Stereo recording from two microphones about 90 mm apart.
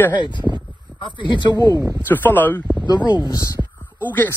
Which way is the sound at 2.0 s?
20° left (ahead or behind).